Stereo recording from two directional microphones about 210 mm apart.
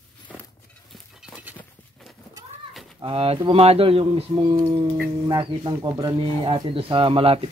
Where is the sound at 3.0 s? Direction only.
25° right (ahead or behind).